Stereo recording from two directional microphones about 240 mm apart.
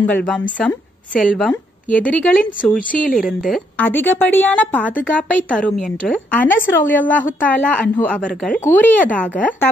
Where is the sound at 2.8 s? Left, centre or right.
Left.